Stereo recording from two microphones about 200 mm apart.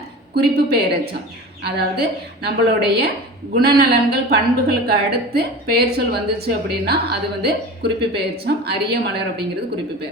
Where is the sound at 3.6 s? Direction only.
50° right (ahead or behind).